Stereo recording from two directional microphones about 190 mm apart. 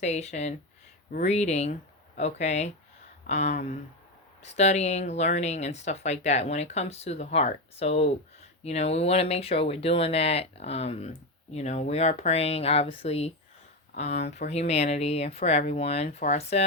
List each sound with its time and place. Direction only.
0.0 s speech: 35° left (ahead or behind)